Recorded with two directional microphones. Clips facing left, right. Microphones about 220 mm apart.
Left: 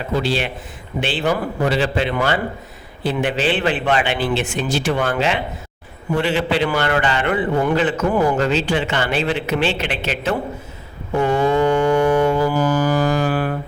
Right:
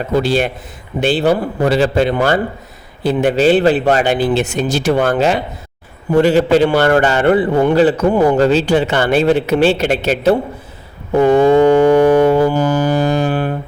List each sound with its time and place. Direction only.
0.1 s a man's voice: 45° right (ahead or behind)
11.1 s music: 35° right (ahead or behind)